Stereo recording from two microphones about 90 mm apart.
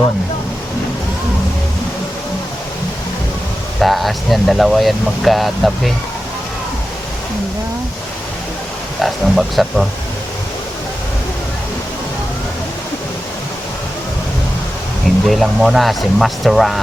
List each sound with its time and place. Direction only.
3.8 s speech: centre (ahead or behind)
9.0 s speech: centre (ahead or behind)
15.0 s speech: centre (ahead or behind)